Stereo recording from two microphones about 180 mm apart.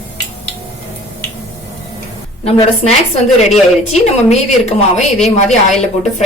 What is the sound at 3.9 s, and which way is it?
Speech, 35° left (ahead or behind).